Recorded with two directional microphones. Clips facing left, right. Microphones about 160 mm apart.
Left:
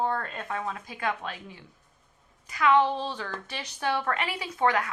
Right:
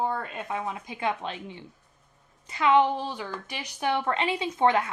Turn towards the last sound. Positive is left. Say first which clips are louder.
# right 3 dB
turn(degrees=-25)  # may be behind; listen again after turning